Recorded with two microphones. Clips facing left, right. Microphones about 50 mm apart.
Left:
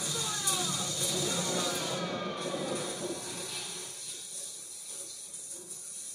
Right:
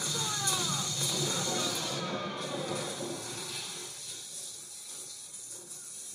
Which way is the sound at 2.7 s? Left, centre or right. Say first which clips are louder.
Left 1 dB; left.